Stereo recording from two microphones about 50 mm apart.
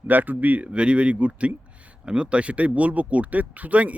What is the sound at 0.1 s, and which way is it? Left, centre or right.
Speech, right.